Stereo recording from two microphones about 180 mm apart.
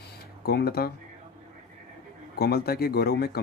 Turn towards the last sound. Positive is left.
turn(degrees=60)  # may be behind; listen again after turning